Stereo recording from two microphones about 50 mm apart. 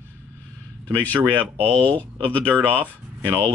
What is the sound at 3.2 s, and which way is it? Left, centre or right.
Speech, right.